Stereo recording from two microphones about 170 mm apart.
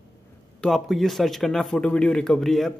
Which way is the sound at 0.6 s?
Centre (ahead or behind).